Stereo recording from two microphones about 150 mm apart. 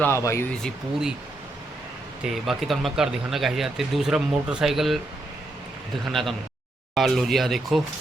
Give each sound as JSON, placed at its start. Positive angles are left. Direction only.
{"t": 0.0, "sound": "speech", "side_deg": 20}
{"t": 0.6, "sound": "speech", "side_deg": -5}
{"t": 2.2, "sound": "speech", "side_deg": 0}
{"t": 6.1, "sound": "speech", "side_deg": 0}